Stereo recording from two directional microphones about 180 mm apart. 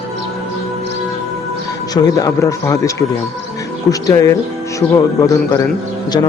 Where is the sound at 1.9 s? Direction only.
20° left (ahead or behind).